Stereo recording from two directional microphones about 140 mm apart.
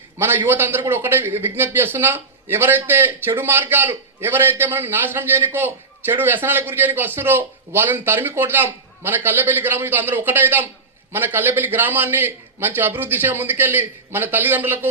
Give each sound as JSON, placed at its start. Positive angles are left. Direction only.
{"t": 0.2, "sound": "a man's voice", "side_deg": -15}